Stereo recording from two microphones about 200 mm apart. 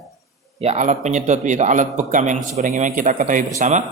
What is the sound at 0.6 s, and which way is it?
A man's voice, 35° right (ahead or behind).